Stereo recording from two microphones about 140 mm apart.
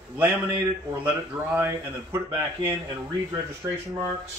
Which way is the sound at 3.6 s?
15° right (ahead or behind).